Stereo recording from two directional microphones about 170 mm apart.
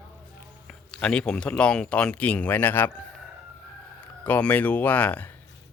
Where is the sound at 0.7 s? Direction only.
5° left (ahead or behind).